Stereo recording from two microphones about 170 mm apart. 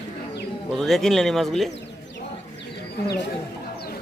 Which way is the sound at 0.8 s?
Centre (ahead or behind).